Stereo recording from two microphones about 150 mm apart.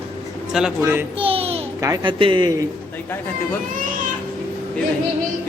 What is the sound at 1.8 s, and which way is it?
Speech, 25° right (ahead or behind).